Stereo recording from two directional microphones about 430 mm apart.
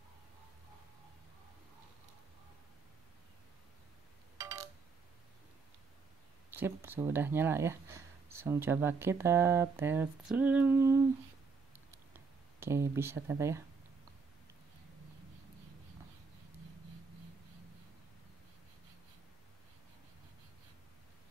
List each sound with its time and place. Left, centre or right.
4.4 s a sound: centre
6.5 s speech: centre
12.5 s speech: centre